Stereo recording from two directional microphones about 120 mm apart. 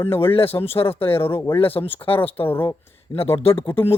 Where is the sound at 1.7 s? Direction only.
50° left (ahead or behind).